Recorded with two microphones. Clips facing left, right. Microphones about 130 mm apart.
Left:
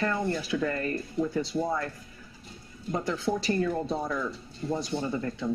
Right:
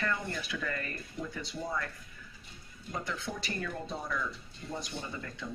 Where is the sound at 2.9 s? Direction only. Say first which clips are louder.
Left 9 dB; 30° left (ahead or behind).